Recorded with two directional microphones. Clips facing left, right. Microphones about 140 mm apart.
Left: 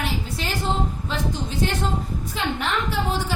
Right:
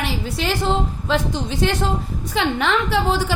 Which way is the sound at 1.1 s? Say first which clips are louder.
Right 6 dB; 90° right.